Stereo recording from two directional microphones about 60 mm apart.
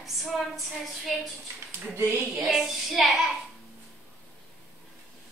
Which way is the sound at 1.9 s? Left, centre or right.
Right.